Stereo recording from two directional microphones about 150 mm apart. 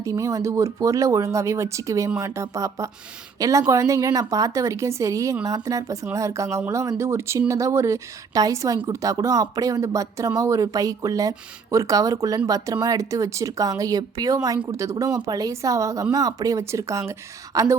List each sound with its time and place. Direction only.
0.0 s a woman's voice: 20° right (ahead or behind)